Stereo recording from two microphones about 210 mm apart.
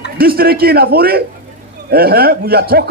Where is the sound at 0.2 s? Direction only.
45° right (ahead or behind).